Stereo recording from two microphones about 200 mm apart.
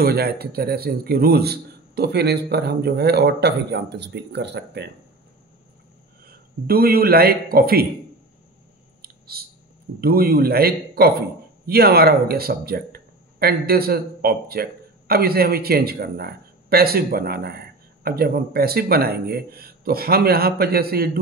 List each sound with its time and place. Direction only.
0.0 s a man's voice: 50° right (ahead or behind)
6.2 s a man's voice: 50° right (ahead or behind)
9.0 s a sound: 50° right (ahead or behind)
9.9 s a man's voice: 50° right (ahead or behind)